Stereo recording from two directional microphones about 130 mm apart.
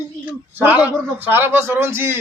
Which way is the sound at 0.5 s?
10° right (ahead or behind).